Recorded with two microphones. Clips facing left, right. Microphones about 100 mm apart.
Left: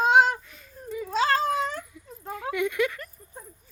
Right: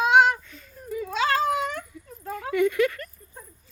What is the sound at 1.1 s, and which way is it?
Cat, 35° left (ahead or behind).